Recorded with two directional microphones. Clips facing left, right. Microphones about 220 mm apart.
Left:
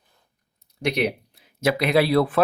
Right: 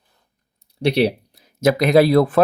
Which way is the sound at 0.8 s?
30° right (ahead or behind).